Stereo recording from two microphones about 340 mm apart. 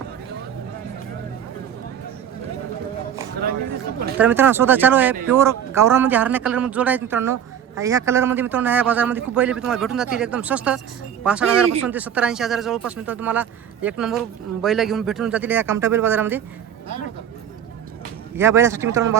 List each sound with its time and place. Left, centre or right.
4.2 s speech: centre
18.3 s speech: centre